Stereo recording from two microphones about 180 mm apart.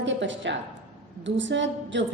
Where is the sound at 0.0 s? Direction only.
90° right.